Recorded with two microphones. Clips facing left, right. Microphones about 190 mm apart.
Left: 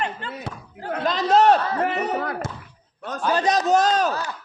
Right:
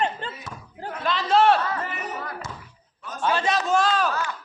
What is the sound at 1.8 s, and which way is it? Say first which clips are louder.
Speech: left 9 dB; 65° left (ahead or behind).